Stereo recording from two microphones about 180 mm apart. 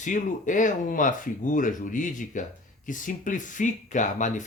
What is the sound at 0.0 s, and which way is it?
Speech, 45° left (ahead or behind).